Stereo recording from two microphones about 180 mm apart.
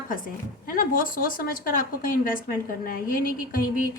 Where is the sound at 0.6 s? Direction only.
50° left (ahead or behind).